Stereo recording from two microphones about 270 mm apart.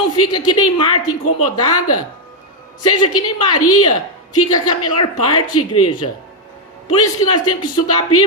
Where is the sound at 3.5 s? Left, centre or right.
Left.